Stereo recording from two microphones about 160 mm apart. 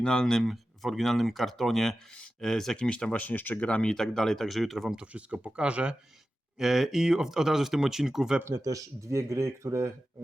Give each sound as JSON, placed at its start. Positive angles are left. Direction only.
{"t": 0.0, "sound": "speech", "side_deg": 5}
{"t": 8.4, "sound": "speech", "side_deg": -20}